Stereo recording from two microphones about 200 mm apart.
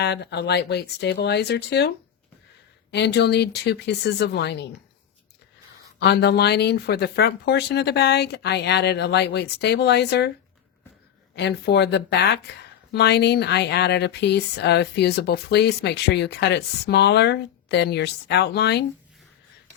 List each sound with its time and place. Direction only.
0.0 s speech: 55° left (ahead or behind)
2.9 s speech: 60° left (ahead or behind)
6.0 s speech: 55° left (ahead or behind)
11.3 s speech: 55° left (ahead or behind)